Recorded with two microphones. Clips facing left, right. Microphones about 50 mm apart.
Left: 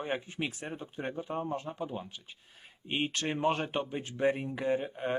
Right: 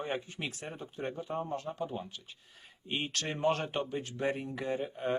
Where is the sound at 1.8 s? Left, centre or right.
Centre.